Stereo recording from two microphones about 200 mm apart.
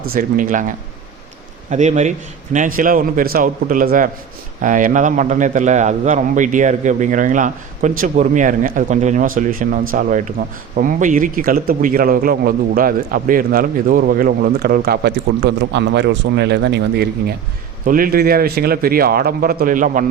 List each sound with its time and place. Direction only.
0.0 s a man's voice: 45° right (ahead or behind)
1.7 s a man's voice: 35° right (ahead or behind)